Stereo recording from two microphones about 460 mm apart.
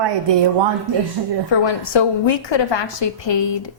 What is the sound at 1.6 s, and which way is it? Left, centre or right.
A woman's voice, left.